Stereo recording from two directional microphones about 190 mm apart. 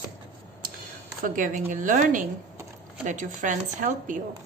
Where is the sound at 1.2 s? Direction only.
45° right (ahead or behind).